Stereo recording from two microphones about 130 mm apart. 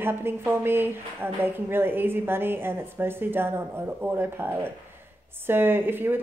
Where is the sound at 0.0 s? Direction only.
15° right (ahead or behind).